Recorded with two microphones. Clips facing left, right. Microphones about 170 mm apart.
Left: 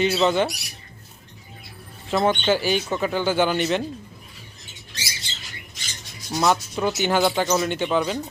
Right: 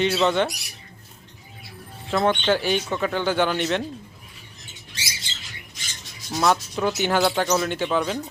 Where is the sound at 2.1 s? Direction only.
5° left (ahead or behind).